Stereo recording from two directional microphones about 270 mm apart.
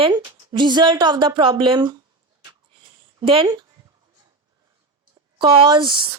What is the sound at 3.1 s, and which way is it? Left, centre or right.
Speech, centre.